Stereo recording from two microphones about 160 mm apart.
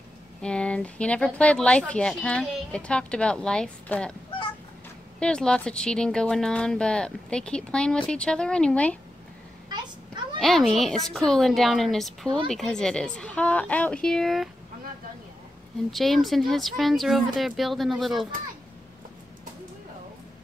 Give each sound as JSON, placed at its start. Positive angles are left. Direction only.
{"t": 0.4, "sound": "speech", "side_deg": 5}
{"t": 5.2, "sound": "speech", "side_deg": 5}
{"t": 9.7, "sound": "a sound", "side_deg": -30}
{"t": 10.4, "sound": "speech", "side_deg": 0}
{"t": 15.9, "sound": "speech", "side_deg": 0}